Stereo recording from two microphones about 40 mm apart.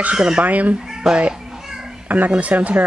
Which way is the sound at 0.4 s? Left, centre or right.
Right.